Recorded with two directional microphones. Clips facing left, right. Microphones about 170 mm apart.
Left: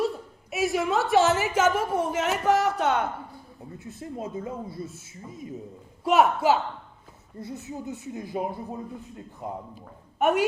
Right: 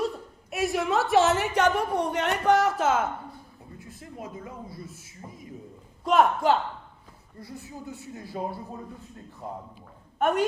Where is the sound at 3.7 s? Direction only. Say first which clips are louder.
Left 6 dB; 25° left (ahead or behind).